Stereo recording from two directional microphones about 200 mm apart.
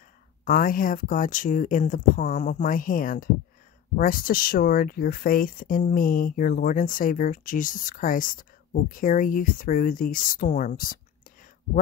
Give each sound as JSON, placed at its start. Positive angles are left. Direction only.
{"t": 0.5, "sound": "speech", "side_deg": 45}